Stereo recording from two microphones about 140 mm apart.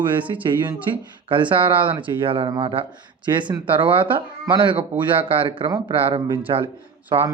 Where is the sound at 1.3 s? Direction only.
35° right (ahead or behind).